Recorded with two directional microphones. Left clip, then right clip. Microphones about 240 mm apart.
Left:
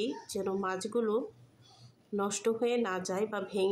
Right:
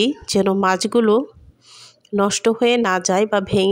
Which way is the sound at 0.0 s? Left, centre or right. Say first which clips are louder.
Right 16 dB; right.